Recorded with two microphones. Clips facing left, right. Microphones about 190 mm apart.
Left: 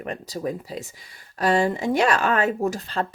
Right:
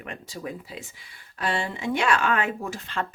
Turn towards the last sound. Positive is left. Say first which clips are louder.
# left 6 dB
turn(degrees=40)  # may be behind; listen again after turning